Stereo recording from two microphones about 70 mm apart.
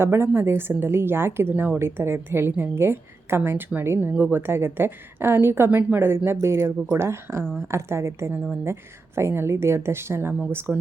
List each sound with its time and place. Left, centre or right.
0.0 s a woman's voice: right